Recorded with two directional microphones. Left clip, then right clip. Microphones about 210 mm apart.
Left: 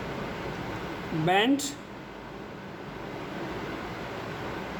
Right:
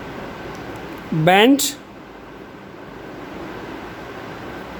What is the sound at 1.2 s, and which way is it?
Speech, 50° right (ahead or behind).